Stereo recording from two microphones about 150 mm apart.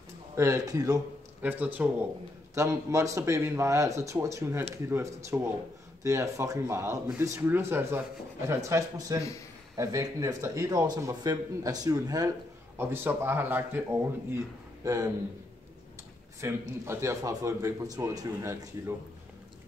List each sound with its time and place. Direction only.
0.4 s a man's voice: 20° right (ahead or behind)
1.4 s a man's voice: 10° right (ahead or behind)
12.7 s a man's voice: 15° right (ahead or behind)
16.3 s a man's voice: 15° right (ahead or behind)